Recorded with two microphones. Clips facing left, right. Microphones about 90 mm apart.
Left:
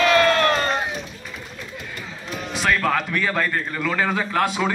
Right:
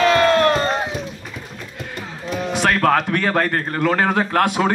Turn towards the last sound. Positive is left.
turn(degrees=-60)  # may be behind; listen again after turning